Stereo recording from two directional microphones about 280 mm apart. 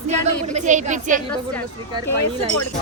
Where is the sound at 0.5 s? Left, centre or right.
Right.